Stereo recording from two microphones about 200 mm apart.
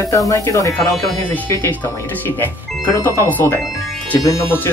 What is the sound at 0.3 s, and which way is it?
Speech, 15° left (ahead or behind).